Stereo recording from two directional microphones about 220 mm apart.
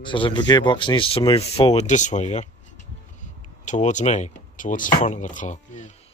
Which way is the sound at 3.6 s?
35° left (ahead or behind).